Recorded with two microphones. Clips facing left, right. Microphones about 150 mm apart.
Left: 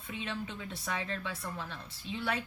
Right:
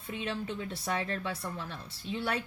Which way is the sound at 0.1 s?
45° right (ahead or behind).